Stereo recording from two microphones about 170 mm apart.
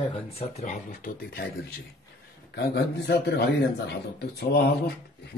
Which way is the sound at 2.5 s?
85° left.